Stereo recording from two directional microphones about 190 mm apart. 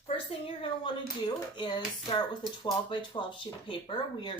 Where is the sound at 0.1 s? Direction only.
30° left (ahead or behind).